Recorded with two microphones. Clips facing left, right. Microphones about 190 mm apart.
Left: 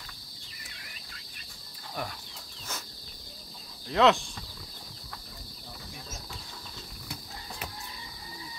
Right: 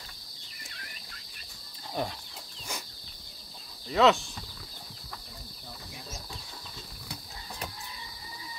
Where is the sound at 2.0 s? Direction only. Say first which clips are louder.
Right 4 dB; 20° right (ahead or behind).